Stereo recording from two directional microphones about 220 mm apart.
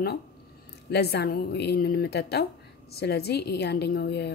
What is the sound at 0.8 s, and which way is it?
A woman's voice, 50° left (ahead or behind).